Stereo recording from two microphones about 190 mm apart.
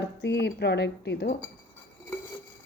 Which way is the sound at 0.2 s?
60° left (ahead or behind).